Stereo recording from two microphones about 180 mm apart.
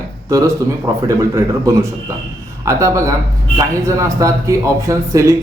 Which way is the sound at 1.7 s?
15° right (ahead or behind).